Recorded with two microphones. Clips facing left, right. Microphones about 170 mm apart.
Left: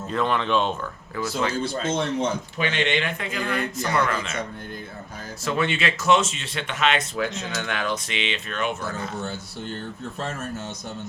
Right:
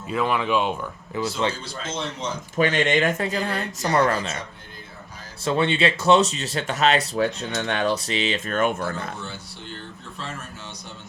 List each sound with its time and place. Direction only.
0.1 s speech: 5° right (ahead or behind)
1.2 s speech: 25° right (ahead or behind)
1.5 s a man's voice: 55° left (ahead or behind)
2.6 s speech: 45° right (ahead or behind)
5.5 s speech: 30° right (ahead or behind); by 9.0 s 50° right (ahead or behind)